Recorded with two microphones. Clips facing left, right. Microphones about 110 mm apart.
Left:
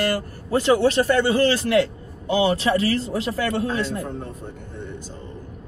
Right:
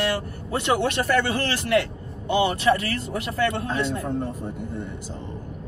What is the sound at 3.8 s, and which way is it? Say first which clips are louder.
Speech: right 1 dB; centre (ahead or behind).